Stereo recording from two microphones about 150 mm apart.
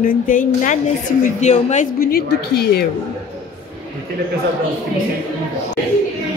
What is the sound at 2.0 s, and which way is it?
Speech, 90° left.